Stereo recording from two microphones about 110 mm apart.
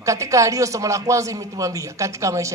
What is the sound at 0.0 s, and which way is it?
Speech, 30° right (ahead or behind).